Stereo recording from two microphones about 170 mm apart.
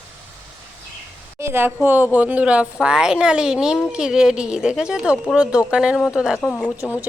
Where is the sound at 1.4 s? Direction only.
15° right (ahead or behind); by 6.7 s 5° left (ahead or behind).